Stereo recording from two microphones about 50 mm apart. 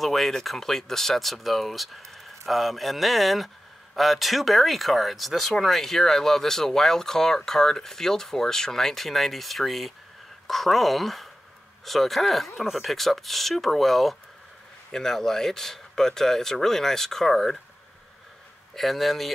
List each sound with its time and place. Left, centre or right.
0.0 s speech: centre
18.8 s speech: centre